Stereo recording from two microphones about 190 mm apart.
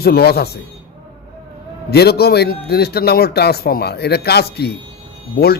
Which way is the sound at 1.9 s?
55° left (ahead or behind).